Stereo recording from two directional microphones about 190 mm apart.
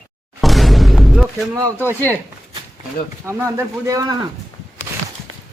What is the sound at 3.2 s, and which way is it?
Speech, 15° right (ahead or behind).